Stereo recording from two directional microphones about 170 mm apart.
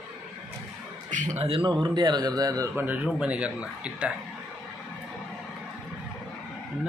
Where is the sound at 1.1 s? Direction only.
45° right (ahead or behind); by 4.1 s 5° right (ahead or behind).